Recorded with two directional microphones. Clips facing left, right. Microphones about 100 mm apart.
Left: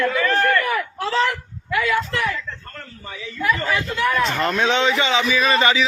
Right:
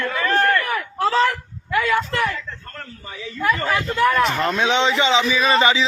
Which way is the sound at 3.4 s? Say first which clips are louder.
Right 1 dB; 40° right (ahead or behind).